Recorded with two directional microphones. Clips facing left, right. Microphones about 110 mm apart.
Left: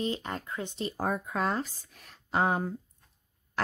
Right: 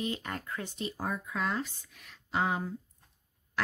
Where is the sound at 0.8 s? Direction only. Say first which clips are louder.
Left 5 dB; 50° left (ahead or behind).